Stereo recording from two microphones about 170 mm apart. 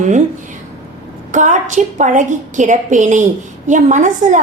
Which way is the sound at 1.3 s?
45° right (ahead or behind).